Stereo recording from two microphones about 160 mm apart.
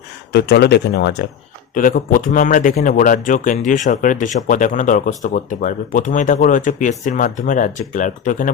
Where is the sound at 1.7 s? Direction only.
60° left (ahead or behind).